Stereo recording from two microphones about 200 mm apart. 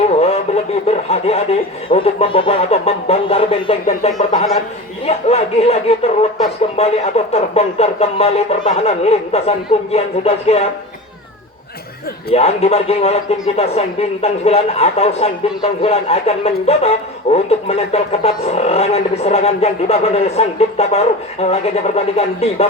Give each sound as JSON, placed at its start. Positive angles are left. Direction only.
{"t": 0.2, "sound": "a sound", "side_deg": 30}
{"t": 1.9, "sound": "speech", "side_deg": 25}
{"t": 5.0, "sound": "snicker", "side_deg": 30}
{"t": 6.6, "sound": "speech", "side_deg": 30}
{"t": 12.3, "sound": "speech", "side_deg": 30}